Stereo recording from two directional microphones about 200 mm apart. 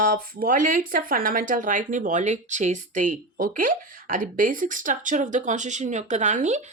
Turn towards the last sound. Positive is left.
turn(degrees=-35)  # may be behind; listen again after turning